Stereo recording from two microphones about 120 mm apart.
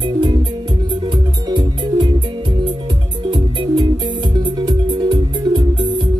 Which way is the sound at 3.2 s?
40° right (ahead or behind).